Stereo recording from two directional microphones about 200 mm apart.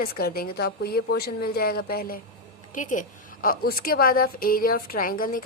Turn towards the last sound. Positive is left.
turn(degrees=45)  # may be behind; listen again after turning